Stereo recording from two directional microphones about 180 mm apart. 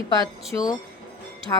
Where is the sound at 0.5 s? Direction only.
10° left (ahead or behind).